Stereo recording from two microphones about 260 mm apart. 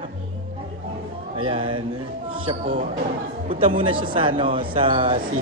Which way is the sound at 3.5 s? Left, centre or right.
Right.